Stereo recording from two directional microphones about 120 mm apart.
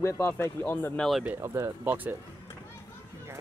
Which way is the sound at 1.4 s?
25° right (ahead or behind).